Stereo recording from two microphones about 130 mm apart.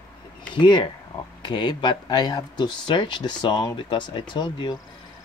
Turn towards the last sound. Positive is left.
turn(degrees=35)  # may be behind; listen again after turning